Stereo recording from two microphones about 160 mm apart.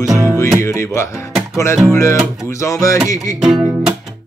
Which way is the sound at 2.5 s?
20° left (ahead or behind).